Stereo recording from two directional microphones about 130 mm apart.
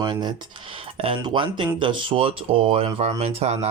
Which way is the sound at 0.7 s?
45° right (ahead or behind).